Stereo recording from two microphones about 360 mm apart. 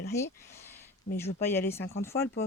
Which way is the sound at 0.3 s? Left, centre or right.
Centre.